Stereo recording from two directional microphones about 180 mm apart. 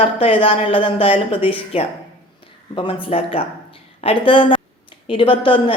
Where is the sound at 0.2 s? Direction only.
30° left (ahead or behind).